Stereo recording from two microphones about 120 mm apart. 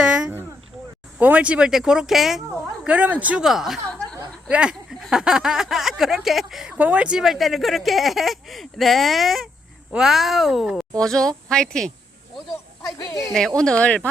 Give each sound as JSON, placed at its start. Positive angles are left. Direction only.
{"t": 0.0, "sound": "a sound", "side_deg": -5}
{"t": 1.2, "sound": "speech", "side_deg": -10}
{"t": 2.8, "sound": "speech", "side_deg": -10}
{"t": 3.4, "sound": "speech", "side_deg": 0}
{"t": 12.8, "sound": "speech", "side_deg": 30}
{"t": 13.6, "sound": "speech", "side_deg": 10}